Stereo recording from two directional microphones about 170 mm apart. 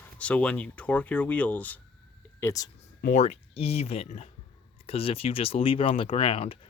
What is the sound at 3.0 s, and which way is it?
Speech, 45° left (ahead or behind).